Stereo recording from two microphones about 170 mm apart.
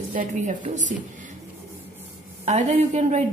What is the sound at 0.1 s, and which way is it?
Speech, 50° right (ahead or behind).